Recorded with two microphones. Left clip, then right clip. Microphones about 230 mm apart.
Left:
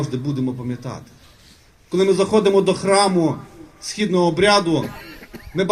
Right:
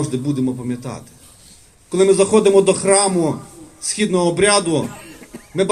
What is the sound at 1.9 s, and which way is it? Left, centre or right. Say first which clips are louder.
A man's voice: right 3 dB; left.